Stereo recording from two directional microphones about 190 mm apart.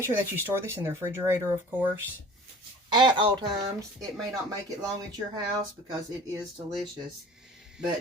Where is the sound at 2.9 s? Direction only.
25° right (ahead or behind).